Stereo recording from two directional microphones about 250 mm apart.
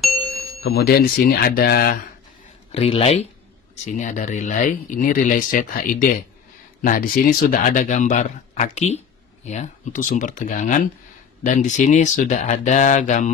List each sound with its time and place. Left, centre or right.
0.6 s speech: left
2.7 s speech: left